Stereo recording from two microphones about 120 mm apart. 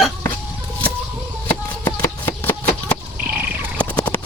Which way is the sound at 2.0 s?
20° left (ahead or behind).